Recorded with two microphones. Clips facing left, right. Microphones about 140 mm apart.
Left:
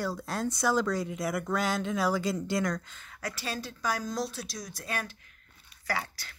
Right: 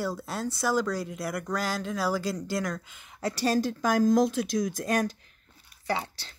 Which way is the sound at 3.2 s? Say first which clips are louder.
Right 10 dB; 35° right (ahead or behind).